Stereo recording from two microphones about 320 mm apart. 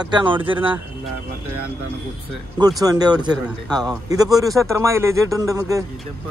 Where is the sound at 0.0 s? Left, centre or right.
Centre.